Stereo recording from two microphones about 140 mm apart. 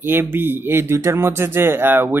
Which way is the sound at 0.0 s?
15° right (ahead or behind).